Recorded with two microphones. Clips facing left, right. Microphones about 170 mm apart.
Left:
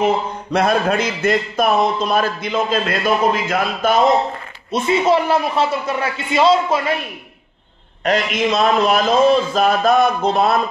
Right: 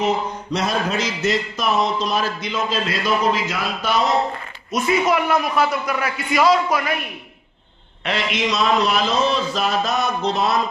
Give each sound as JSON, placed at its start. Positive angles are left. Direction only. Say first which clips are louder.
{"t": 0.0, "sound": "speech", "louder": "left 3 dB", "side_deg": 55}
{"t": 4.6, "sound": "a man's voice", "louder": "left 3 dB", "side_deg": 25}
{"t": 8.0, "sound": "speech", "louder": "left 5 dB", "side_deg": 45}